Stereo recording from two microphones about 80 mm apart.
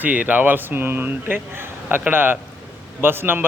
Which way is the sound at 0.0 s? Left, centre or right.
Centre.